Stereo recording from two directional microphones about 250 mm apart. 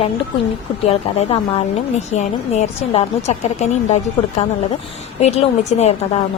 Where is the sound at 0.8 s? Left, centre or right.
Left.